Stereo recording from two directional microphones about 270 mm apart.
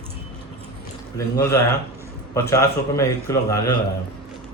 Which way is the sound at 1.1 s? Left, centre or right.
Centre.